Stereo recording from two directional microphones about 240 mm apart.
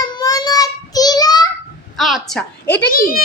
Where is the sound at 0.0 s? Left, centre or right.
Centre.